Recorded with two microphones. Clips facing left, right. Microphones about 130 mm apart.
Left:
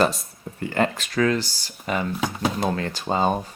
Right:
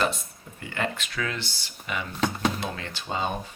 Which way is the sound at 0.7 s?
40° left (ahead or behind).